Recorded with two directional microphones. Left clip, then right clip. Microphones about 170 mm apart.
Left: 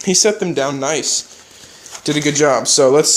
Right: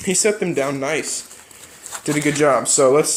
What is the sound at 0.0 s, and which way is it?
Speech, 25° left (ahead or behind).